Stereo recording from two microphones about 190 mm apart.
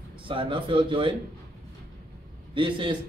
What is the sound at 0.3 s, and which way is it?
Speech, 25° right (ahead or behind).